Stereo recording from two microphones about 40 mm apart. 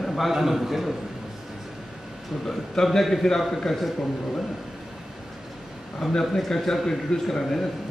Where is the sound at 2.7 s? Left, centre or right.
Centre.